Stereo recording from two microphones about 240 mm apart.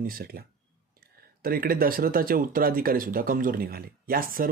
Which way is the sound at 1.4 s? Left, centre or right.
Right.